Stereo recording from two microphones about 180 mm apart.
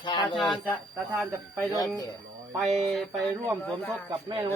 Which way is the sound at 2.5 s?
Centre (ahead or behind).